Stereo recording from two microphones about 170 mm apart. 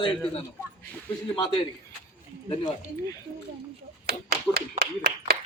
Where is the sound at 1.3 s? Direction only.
25° left (ahead or behind).